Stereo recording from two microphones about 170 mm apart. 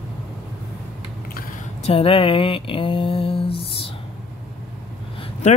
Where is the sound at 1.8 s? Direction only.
35° left (ahead or behind).